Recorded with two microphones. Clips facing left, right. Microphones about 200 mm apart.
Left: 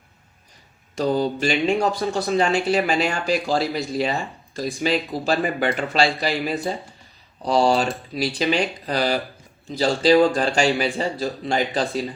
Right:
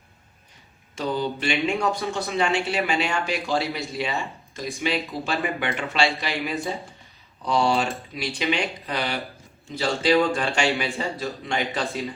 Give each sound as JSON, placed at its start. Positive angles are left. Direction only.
{"t": 0.9, "sound": "a man's voice", "side_deg": 40}